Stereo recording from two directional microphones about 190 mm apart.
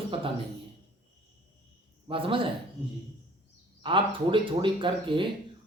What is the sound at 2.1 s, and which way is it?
Speech, 30° right (ahead or behind).